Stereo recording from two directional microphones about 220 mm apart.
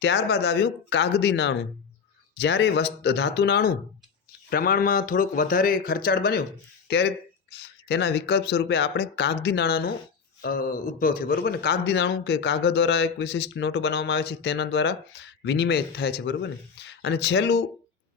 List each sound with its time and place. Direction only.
0.0 s a man's voice: 50° left (ahead or behind)